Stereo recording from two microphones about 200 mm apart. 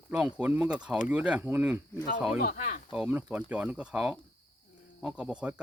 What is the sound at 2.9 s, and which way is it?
Speech, 5° right (ahead or behind).